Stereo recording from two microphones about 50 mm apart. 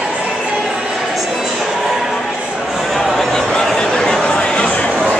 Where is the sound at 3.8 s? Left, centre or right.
Centre.